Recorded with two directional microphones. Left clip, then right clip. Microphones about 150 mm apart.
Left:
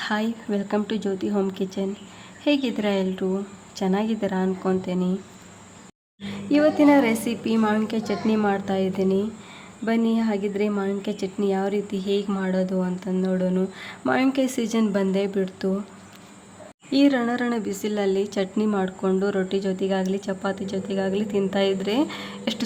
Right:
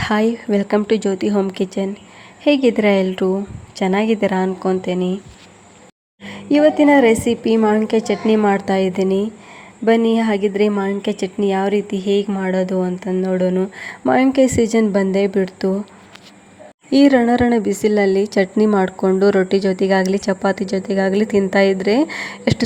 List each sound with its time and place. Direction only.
0.0 s speech: 35° right (ahead or behind)
6.2 s speech: 30° right (ahead or behind)
16.9 s speech: 35° right (ahead or behind)